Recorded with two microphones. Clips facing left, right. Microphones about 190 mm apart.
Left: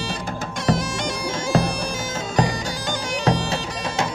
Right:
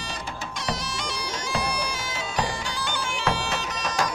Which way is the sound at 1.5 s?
45° left (ahead or behind).